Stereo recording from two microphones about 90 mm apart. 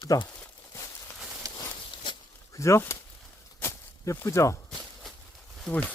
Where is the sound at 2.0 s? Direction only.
60° left (ahead or behind).